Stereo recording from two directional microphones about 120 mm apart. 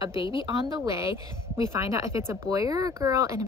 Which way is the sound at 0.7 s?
30° right (ahead or behind).